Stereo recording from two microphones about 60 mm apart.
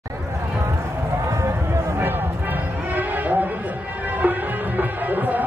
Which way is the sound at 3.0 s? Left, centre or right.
Right.